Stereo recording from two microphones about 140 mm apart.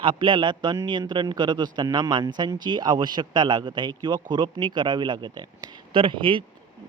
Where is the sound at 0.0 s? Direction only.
35° right (ahead or behind).